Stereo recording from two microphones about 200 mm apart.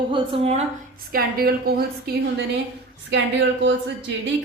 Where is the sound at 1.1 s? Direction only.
50° right (ahead or behind).